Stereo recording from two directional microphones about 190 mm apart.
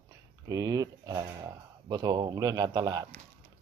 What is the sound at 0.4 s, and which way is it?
Speech, 20° right (ahead or behind).